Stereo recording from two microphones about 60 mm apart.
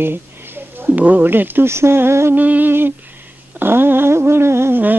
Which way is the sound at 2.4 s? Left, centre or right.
Right.